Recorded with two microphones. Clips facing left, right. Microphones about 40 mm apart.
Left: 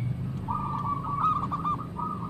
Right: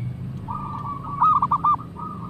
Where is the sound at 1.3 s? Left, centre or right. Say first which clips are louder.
Right 13 dB; right.